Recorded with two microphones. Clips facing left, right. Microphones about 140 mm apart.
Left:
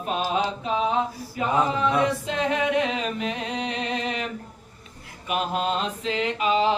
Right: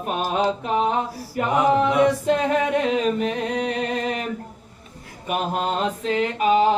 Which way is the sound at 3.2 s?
45° right (ahead or behind).